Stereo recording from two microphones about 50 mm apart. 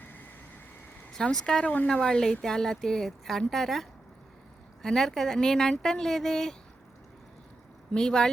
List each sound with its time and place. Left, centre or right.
0.0 s vehicle: left
1.1 s speech: centre
7.9 s speech: centre